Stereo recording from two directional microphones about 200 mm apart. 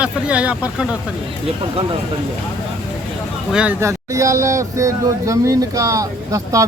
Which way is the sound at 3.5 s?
5° right (ahead or behind).